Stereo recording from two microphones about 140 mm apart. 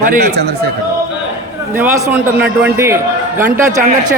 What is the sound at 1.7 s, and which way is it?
A man's voice, 15° right (ahead or behind).